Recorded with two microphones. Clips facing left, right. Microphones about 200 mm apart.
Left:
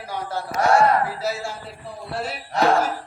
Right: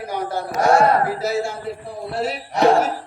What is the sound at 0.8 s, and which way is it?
Speech, 45° right (ahead or behind).